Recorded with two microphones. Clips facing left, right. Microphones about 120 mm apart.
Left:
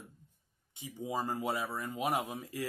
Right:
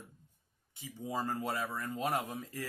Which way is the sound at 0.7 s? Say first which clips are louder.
Left 1 dB; 15° left (ahead or behind).